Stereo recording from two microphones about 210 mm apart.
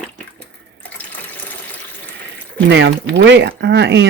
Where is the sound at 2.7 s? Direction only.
60° right (ahead or behind).